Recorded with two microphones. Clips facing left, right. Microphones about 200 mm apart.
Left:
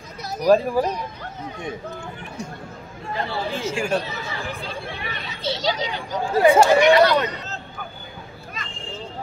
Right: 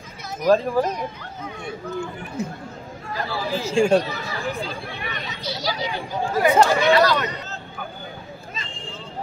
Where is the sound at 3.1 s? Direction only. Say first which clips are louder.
Even; 25° left (ahead or behind).